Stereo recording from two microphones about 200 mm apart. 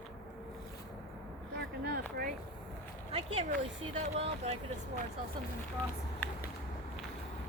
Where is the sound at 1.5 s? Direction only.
55° right (ahead or behind).